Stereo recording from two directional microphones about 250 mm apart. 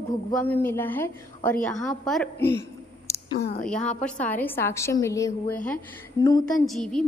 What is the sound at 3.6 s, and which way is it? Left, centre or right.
A woman's voice, centre.